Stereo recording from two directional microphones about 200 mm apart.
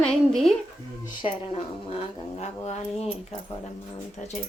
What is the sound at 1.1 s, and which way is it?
Speech, 25° left (ahead or behind).